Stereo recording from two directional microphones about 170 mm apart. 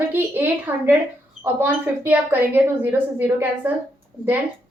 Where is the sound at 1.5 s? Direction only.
10° right (ahead or behind).